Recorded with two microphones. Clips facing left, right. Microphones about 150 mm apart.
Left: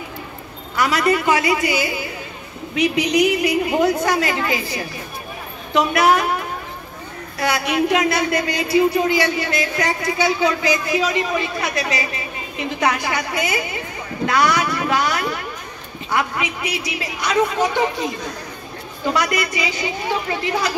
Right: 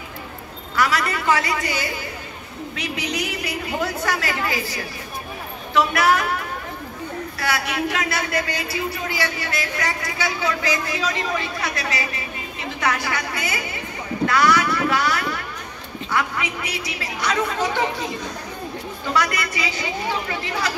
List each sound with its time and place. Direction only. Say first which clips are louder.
0.7 s a woman's voice: left 4 dB; 20° left (ahead or behind)
5.7 s a man's voice: left 3 dB; 20° left (ahead or behind)
19.1 s a woman's voice: left 1 dB; 15° left (ahead or behind)